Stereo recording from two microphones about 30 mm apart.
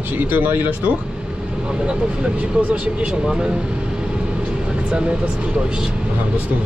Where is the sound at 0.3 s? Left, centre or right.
Right.